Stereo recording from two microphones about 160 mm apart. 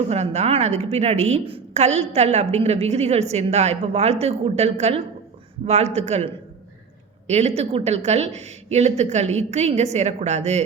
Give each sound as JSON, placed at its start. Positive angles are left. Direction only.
{"t": 0.1, "sound": "a woman's voice", "side_deg": -40}